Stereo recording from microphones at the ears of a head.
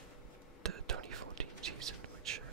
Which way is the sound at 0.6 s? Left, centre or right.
Right.